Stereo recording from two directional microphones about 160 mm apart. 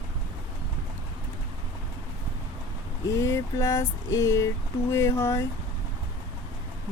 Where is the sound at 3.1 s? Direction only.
20° left (ahead or behind).